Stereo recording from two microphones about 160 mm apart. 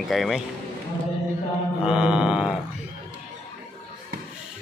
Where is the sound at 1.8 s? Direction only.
5° right (ahead or behind).